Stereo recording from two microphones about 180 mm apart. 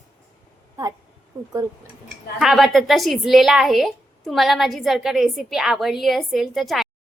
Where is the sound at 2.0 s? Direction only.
Centre (ahead or behind).